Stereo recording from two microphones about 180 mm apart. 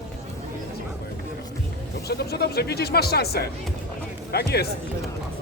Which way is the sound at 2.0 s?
65° left (ahead or behind).